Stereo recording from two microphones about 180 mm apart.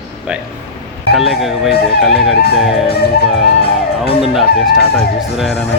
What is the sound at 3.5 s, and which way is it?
Music, 30° left (ahead or behind).